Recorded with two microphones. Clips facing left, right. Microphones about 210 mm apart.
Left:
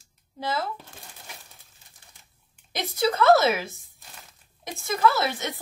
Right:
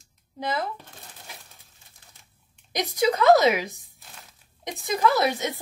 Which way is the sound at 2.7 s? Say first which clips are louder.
Right 1 dB; 15° right (ahead or behind).